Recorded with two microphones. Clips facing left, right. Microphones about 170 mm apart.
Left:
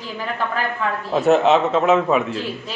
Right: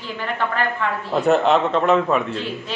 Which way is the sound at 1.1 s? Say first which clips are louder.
Left 2 dB; centre (ahead or behind).